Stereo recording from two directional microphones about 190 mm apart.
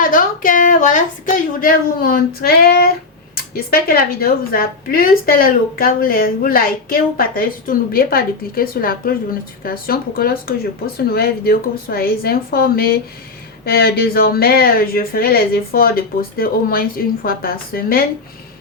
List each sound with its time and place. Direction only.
0.0 s a woman's voice: 45° left (ahead or behind)